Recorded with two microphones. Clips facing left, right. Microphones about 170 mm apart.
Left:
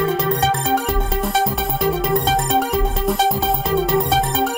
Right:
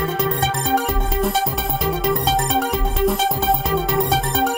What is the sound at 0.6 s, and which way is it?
Music, centre (ahead or behind).